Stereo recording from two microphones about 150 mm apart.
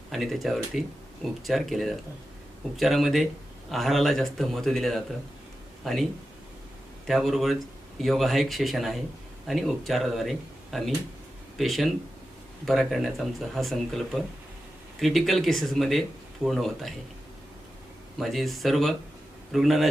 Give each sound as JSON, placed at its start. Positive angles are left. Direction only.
{"t": 0.1, "sound": "speech", "side_deg": 0}
{"t": 7.1, "sound": "speech", "side_deg": 0}
{"t": 18.2, "sound": "speech", "side_deg": 0}